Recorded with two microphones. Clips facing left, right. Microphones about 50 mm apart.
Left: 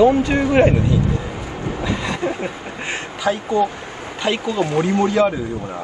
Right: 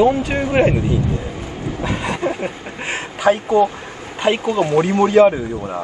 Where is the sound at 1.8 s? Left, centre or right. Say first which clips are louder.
Right 2 dB; right.